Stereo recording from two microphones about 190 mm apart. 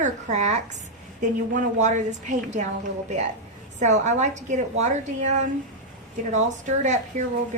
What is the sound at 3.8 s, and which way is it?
Speech, 40° right (ahead or behind).